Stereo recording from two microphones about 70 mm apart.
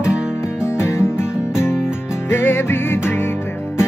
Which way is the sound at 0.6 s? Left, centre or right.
Left.